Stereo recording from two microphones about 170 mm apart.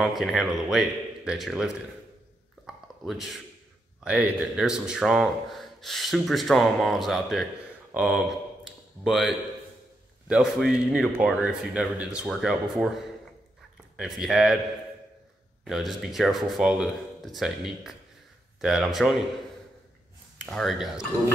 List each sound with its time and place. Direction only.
0.0 s speech: centre (ahead or behind)
2.6 s a sound: centre (ahead or behind)
4.0 s speech: 5° right (ahead or behind)
13.9 s speech: centre (ahead or behind)
15.6 s speech: centre (ahead or behind)
20.3 s speech: 5° left (ahead or behind)